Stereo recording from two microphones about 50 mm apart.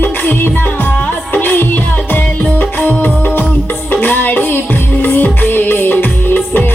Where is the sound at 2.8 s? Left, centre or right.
Left.